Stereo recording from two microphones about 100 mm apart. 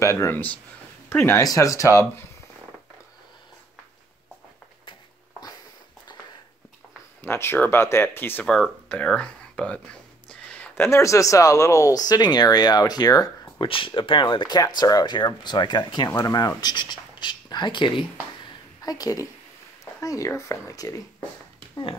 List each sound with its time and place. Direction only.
0.0 s speech: 30° left (ahead or behind)
7.2 s speech: 25° left (ahead or behind)
10.4 s a sound: 15° left (ahead or behind)
10.7 s speech: 25° left (ahead or behind)
13.7 s speech: 60° left (ahead or behind)
14.6 s speech: 40° left (ahead or behind); by 18.0 s 55° left (ahead or behind)
18.8 s speech: 40° left (ahead or behind)